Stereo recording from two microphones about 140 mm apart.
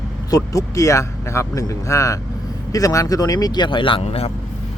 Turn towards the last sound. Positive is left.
turn(degrees=45)  # may be behind; listen again after turning